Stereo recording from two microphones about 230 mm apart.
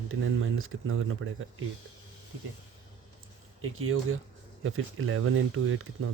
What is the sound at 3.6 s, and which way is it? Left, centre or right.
Speech, right.